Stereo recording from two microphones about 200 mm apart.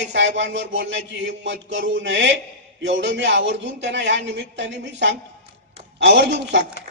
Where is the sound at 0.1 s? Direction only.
65° right (ahead or behind).